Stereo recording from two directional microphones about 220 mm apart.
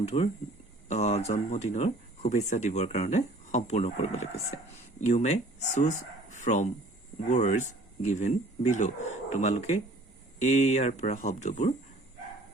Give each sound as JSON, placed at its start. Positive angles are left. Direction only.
{"t": 0.1, "sound": "speech", "side_deg": 30}